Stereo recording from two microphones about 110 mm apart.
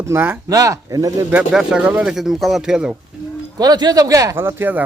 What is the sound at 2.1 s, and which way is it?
Speech, centre (ahead or behind).